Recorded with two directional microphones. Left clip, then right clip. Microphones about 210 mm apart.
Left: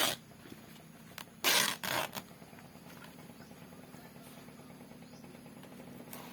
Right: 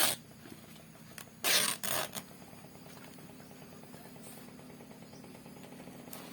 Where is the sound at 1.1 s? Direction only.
5° left (ahead or behind).